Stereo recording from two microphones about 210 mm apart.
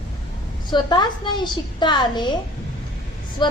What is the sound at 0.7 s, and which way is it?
A woman's voice, 20° left (ahead or behind).